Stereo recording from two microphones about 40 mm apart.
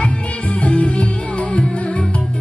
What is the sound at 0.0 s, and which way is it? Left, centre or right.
Music, left.